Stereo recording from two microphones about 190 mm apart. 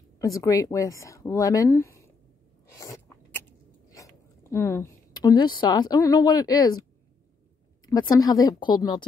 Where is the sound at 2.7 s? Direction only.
15° left (ahead or behind).